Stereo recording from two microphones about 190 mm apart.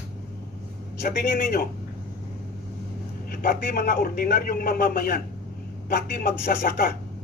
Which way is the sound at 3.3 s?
50° left (ahead or behind).